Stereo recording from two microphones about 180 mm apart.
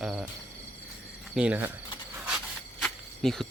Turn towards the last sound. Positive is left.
turn(degrees=0)  # may be behind; listen again after turning